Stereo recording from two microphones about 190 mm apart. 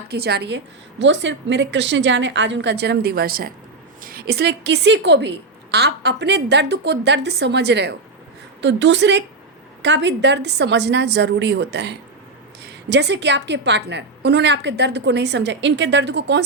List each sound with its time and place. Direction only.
0.1 s a woman's voice: 60° right (ahead or behind)